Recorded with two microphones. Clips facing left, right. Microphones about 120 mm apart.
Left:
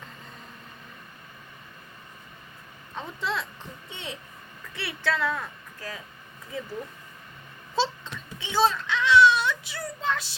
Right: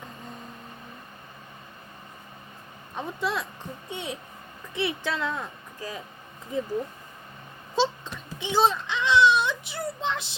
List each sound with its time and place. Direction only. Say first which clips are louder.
2.9 s speech: right 2 dB; 15° right (ahead or behind)
7.8 s a child's voice: right 2 dB; 15° right (ahead or behind)